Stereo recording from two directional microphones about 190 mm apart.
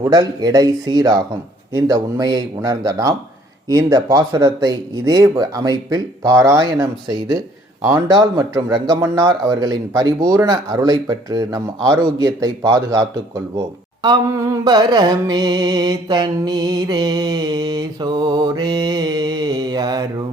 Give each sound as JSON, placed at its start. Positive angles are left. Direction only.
{"t": 0.0, "sound": "music", "side_deg": -20}